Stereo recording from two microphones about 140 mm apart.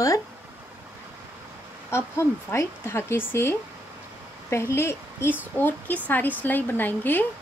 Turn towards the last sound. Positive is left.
turn(degrees=15)  # may be behind; listen again after turning